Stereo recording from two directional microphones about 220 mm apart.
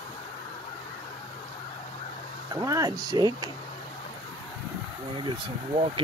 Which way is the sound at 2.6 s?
15° right (ahead or behind).